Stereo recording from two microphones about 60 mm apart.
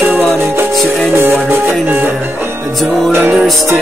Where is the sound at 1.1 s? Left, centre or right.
Right.